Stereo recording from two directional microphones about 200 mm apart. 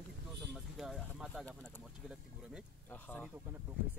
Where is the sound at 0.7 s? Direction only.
Centre (ahead or behind).